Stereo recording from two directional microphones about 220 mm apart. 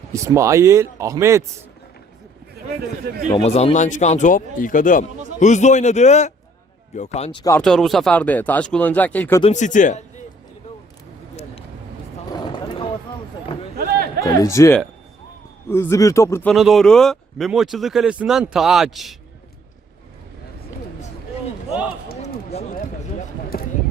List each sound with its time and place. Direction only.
0.1 s speech: 15° right (ahead or behind)
3.3 s speech: 25° left (ahead or behind)
7.5 s speech: centre (ahead or behind)
9.4 s speech: 35° left (ahead or behind)
12.3 s vehicle: 20° left (ahead or behind)
13.7 s a sound: 45° right (ahead or behind)
14.3 s speech: 15° left (ahead or behind)
22.2 s a sound: 35° left (ahead or behind)